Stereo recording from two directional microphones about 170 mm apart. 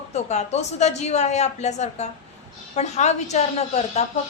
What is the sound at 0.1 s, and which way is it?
A woman's voice, 40° left (ahead or behind).